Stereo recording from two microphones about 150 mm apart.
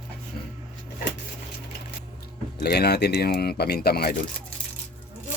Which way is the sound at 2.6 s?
90° left.